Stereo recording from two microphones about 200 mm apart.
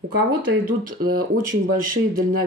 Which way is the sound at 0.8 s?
45° right (ahead or behind).